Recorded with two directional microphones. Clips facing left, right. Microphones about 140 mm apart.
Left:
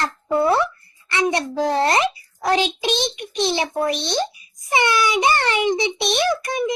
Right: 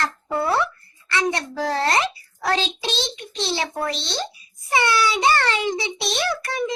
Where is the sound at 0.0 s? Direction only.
20° left (ahead or behind).